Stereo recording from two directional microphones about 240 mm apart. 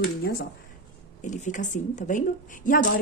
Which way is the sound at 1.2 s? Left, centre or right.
Left.